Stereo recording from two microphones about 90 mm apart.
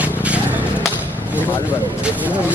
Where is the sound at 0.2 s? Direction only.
15° right (ahead or behind).